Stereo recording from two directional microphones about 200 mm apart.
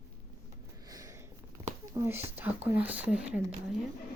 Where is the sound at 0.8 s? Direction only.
20° right (ahead or behind).